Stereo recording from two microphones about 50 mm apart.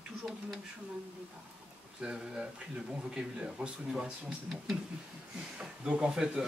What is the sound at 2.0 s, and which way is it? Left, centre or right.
Speech, centre.